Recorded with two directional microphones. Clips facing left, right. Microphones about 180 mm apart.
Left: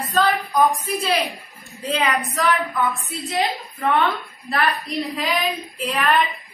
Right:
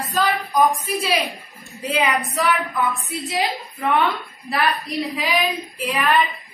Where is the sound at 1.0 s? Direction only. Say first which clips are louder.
Left 1 dB; 15° right (ahead or behind).